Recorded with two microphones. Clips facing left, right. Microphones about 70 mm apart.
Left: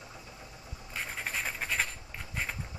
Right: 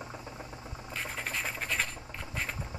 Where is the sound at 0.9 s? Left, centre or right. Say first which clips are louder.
Even; centre.